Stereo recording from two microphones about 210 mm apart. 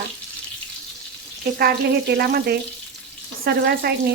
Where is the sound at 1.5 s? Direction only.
50° right (ahead or behind).